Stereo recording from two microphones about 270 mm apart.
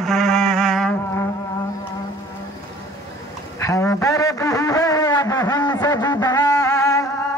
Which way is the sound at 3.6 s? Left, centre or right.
Centre.